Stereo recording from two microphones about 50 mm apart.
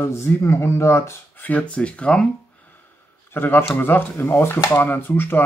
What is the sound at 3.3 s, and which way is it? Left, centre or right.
Speech, left.